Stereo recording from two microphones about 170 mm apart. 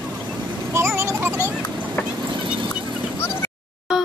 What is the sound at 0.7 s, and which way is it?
Vehicle, 15° right (ahead or behind).